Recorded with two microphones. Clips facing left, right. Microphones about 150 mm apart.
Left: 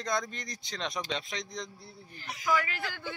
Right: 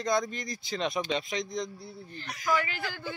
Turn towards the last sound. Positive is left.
turn(degrees=0)  # may be behind; listen again after turning